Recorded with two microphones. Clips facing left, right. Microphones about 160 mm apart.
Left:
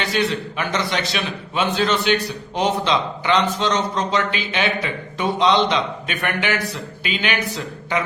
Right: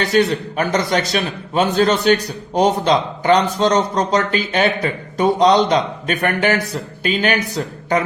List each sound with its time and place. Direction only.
0.0 s a man's voice: 45° right (ahead or behind)